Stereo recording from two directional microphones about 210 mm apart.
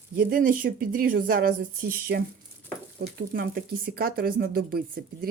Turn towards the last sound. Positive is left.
turn(degrees=-45)  # may be behind; listen again after turning